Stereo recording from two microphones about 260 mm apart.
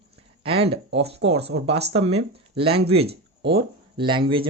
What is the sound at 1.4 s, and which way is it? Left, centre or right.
Speech, right.